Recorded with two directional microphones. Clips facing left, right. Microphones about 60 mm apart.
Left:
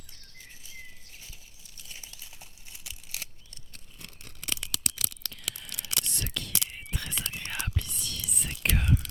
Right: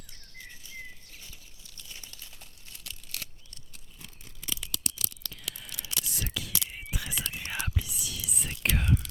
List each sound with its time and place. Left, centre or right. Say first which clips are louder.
1.7 s crumpling: even; centre
4.0 s toothbrush: left 1 dB; left
5.7 s whispering: left 2 dB; left
6.1 s whispering: even; centre